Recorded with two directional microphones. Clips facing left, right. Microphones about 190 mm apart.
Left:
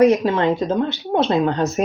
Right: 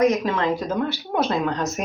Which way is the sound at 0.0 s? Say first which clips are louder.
Left 5 dB; 30° left (ahead or behind).